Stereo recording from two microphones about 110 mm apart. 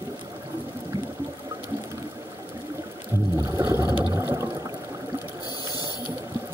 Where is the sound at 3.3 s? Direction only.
25° right (ahead or behind).